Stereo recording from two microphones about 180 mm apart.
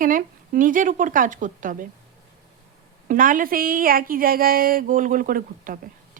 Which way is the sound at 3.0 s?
50° right (ahead or behind).